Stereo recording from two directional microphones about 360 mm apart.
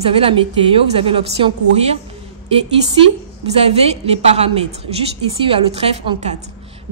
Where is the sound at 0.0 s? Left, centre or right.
Centre.